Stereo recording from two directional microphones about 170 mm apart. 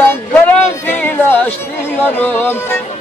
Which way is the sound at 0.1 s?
10° left (ahead or behind).